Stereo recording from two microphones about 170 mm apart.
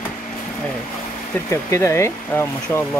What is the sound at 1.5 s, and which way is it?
Speech, 15° left (ahead or behind).